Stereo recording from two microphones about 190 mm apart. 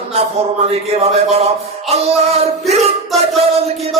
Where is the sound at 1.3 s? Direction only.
30° right (ahead or behind).